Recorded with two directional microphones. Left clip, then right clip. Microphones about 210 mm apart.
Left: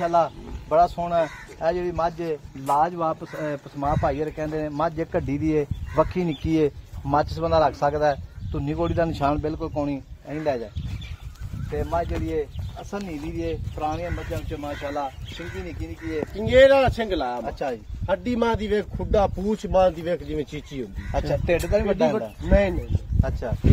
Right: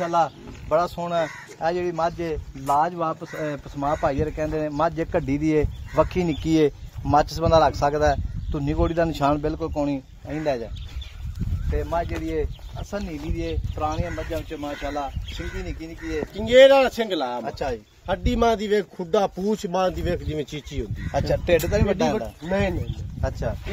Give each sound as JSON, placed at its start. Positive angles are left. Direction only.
{"t": 0.0, "sound": "speech", "side_deg": -45}
{"t": 11.7, "sound": "speech", "side_deg": -40}
{"t": 16.3, "sound": "speech", "side_deg": -40}
{"t": 21.1, "sound": "speech", "side_deg": -35}
{"t": 22.4, "sound": "speech", "side_deg": -35}
{"t": 23.2, "sound": "speech", "side_deg": -50}